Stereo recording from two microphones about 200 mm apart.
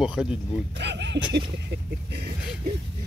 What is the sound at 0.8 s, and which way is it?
Speech, 60° right (ahead or behind).